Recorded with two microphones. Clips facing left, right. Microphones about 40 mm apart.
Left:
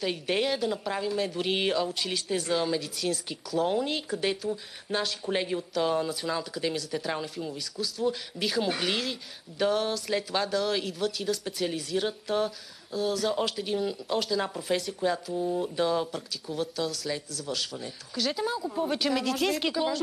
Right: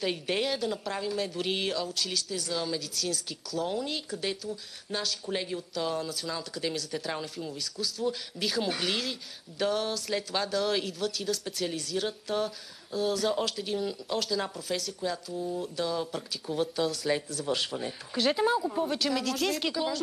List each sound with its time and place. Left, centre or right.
0.0 s speech: centre
1.6 s speech: centre
2.2 s speech: left; by 14.6 s centre
14.7 s speech: centre
16.1 s speech: centre
18.6 s speech: centre
18.9 s speech: centre